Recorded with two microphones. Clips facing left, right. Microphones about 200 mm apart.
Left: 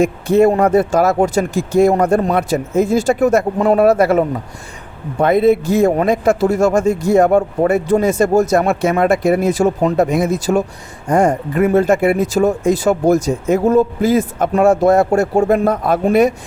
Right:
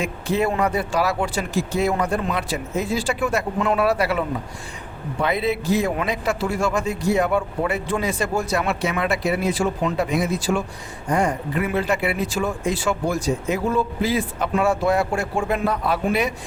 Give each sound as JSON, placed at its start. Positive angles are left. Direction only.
{"t": 0.0, "sound": "a man's voice", "side_deg": 45}